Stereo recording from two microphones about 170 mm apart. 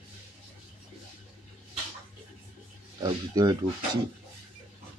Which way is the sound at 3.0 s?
25° right (ahead or behind).